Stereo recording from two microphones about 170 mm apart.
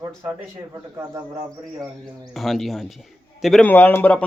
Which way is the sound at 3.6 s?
10° left (ahead or behind).